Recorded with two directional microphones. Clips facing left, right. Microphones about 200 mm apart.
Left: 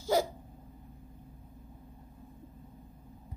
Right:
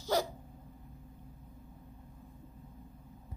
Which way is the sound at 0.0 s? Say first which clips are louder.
Left 3 dB; 10° left (ahead or behind).